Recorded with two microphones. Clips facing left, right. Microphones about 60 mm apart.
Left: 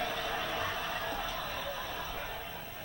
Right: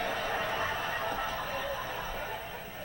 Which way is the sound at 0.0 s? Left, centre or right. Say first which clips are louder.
Right 3 dB; right.